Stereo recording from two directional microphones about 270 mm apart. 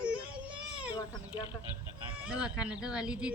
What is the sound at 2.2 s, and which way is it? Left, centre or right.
Speech, centre.